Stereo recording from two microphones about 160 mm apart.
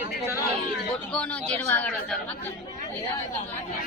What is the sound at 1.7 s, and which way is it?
Speech, 10° left (ahead or behind).